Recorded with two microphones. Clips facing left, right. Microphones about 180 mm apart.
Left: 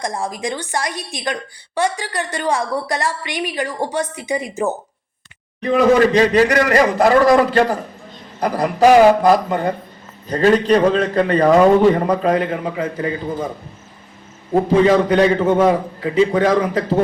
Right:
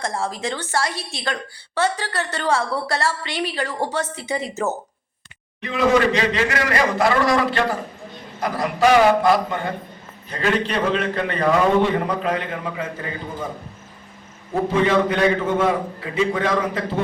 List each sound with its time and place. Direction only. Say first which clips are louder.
0.0 s a woman's voice: left 2 dB; 15° left (ahead or behind)
5.5 s a man's voice: left 5 dB; 40° left (ahead or behind)
14.5 s a man's voice: left 5 dB; 35° left (ahead or behind)